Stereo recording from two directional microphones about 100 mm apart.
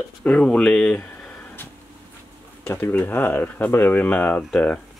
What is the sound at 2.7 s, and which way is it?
Speech, 20° left (ahead or behind).